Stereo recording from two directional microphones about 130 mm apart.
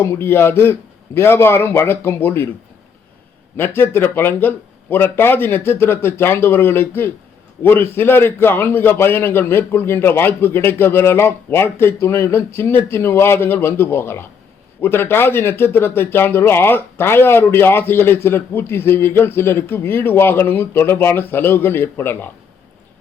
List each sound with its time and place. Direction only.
0.0 s speech: 20° left (ahead or behind)
3.6 s speech: 15° left (ahead or behind)